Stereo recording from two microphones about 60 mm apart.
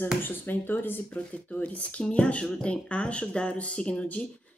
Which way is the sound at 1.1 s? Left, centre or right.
Left.